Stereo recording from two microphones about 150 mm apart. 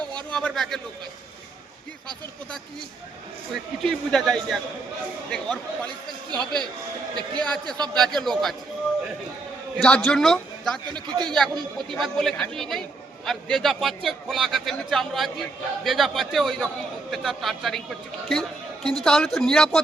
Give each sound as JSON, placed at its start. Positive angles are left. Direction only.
{"t": 0.0, "sound": "a sound", "side_deg": -30}
{"t": 0.3, "sound": "a man's voice", "side_deg": 5}
{"t": 3.5, "sound": "a man's voice", "side_deg": 5}
{"t": 7.3, "sound": "a man's voice", "side_deg": 5}
{"t": 9.7, "sound": "a man's voice", "side_deg": 5}